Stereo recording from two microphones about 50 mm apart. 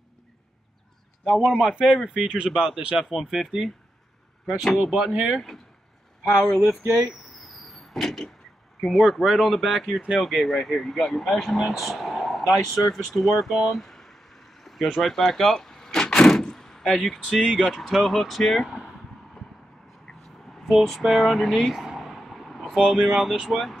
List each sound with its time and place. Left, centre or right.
1.2 s speech: centre
1.5 s a man's voice: centre
3.2 s speech: centre
5.1 s speech: right
6.5 s a sound: left
7.4 s a sound: centre
8.8 s speech: centre
12.9 s a sound: centre
15.0 s door: centre
17.4 s a man's voice: centre
20.1 s vehicle: centre
20.5 s speech: centre